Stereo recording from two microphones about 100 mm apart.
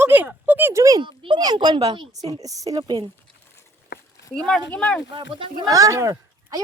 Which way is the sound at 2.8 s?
45° right (ahead or behind).